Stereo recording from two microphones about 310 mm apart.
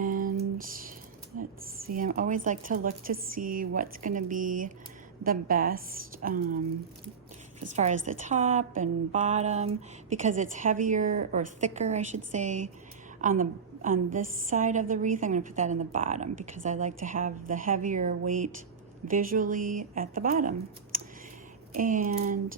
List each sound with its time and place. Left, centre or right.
0.0 s a sound: right
2.0 s a woman's voice: right
7.8 s a woman's voice: right